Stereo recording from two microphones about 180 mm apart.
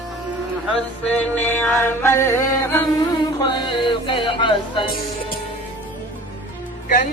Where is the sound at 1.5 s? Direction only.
10° left (ahead or behind); by 4.9 s 30° left (ahead or behind).